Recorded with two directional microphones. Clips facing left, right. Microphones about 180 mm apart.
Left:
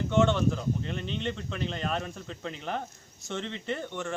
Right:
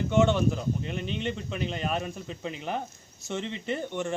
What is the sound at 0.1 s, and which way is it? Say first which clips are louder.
Speech: right 1 dB; 10° right (ahead or behind).